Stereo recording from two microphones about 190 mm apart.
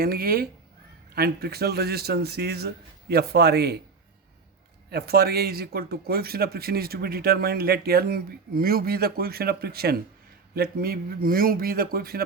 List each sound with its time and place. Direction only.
0.0 s a man's voice: 50° right (ahead or behind)
4.9 s speech: 55° right (ahead or behind)